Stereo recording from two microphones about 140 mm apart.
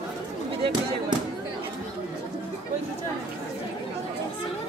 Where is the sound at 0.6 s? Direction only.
35° right (ahead or behind).